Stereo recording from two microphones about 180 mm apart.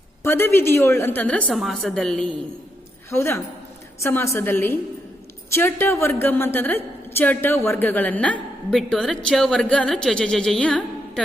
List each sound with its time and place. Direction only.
0.2 s a woman's voice: 15° left (ahead or behind)
3.1 s a woman's voice: 15° left (ahead or behind)